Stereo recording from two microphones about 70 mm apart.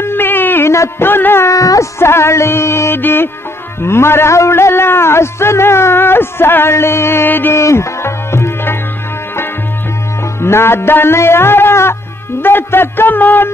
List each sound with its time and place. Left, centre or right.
0.0 s a sound: left
1.5 s music: left
2.0 s a man's voice: left
7.6 s music: left
10.4 s music: left